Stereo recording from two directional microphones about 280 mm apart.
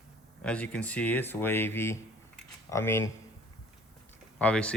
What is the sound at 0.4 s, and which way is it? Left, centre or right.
Speech, centre.